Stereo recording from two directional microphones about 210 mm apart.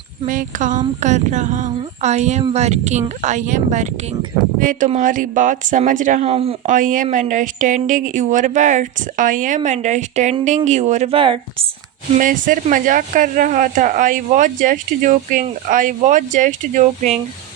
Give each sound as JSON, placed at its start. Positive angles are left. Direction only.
{"t": 0.3, "sound": "speech", "side_deg": -40}
{"t": 12.1, "sound": "speech", "side_deg": -40}